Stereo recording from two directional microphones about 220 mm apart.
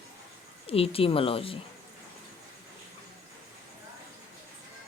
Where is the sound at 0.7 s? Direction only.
25° left (ahead or behind).